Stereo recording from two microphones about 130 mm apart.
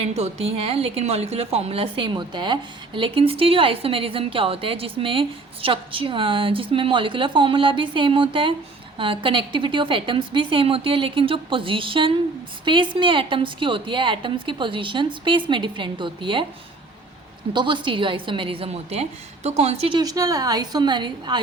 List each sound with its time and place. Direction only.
0.0 s a woman's voice: 55° right (ahead or behind); by 16.5 s 40° right (ahead or behind)
17.5 s a woman's voice: 40° right (ahead or behind)
20.0 s a woman's voice: 30° right (ahead or behind)